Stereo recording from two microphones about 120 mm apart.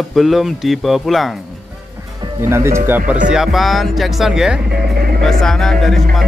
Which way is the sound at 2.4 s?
20° right (ahead or behind).